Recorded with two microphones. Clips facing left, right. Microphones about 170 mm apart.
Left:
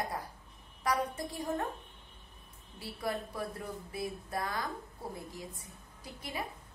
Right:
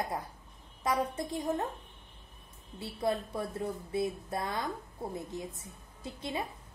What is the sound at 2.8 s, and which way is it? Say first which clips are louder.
A woman's voice: right 4 dB; 25° right (ahead or behind).